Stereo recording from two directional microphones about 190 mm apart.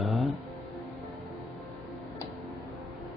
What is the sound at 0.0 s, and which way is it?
Music, centre (ahead or behind).